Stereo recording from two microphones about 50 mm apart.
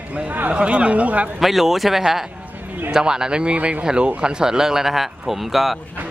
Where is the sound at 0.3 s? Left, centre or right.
Right.